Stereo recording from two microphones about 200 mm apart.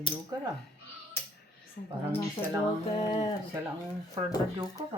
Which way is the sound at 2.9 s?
25° left (ahead or behind).